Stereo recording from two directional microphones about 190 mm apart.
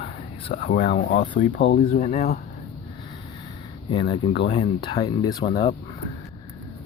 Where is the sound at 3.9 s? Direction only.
25° left (ahead or behind).